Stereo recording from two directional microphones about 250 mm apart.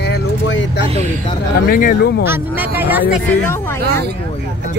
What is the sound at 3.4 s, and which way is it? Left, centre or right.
Speech, centre.